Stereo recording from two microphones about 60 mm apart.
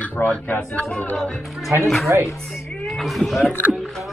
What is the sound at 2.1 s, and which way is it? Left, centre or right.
Speech, right.